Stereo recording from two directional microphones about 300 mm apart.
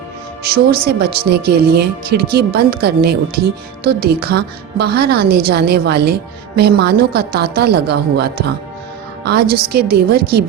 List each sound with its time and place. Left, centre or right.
0.4 s a woman's voice: right